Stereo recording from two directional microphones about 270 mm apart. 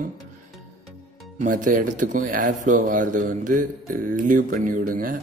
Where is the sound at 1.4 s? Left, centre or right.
Right.